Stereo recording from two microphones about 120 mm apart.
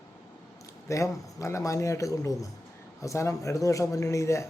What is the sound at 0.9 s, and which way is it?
Speech, 25° left (ahead or behind).